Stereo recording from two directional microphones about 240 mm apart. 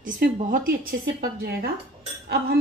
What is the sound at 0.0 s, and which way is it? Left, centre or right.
Speech, right.